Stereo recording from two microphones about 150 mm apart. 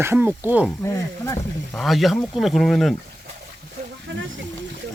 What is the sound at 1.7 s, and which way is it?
Speech, centre (ahead or behind).